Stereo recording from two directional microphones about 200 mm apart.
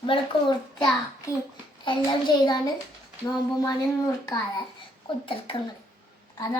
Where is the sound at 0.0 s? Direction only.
25° left (ahead or behind).